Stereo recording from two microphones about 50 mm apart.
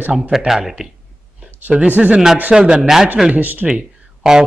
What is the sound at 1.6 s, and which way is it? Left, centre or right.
Speech, right.